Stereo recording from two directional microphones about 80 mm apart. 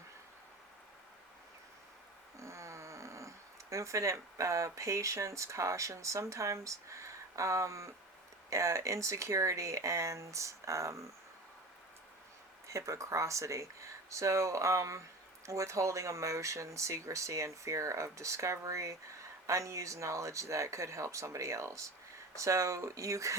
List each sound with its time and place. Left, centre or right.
2.4 s speech: right
12.6 s speech: right